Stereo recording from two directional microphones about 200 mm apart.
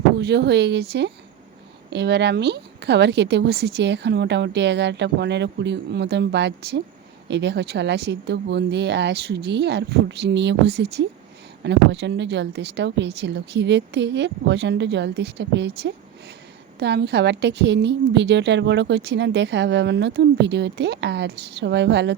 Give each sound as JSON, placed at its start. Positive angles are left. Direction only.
{"t": 0.2, "sound": "a woman's voice", "side_deg": -55}